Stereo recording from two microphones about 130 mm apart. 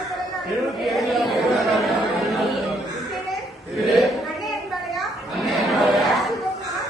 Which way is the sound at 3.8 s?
Centre (ahead or behind).